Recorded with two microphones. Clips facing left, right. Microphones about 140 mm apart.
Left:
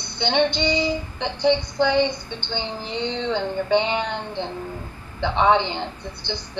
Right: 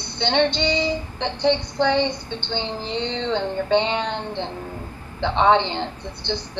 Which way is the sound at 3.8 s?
10° left (ahead or behind).